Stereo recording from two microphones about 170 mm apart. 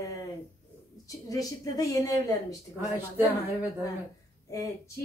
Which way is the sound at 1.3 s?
20° left (ahead or behind).